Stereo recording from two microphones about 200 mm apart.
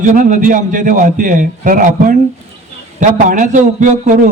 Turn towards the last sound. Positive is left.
turn(degrees=-40)  # may be behind; listen again after turning